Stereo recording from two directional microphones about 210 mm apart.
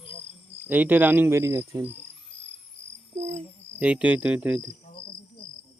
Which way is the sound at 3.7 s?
5° right (ahead or behind).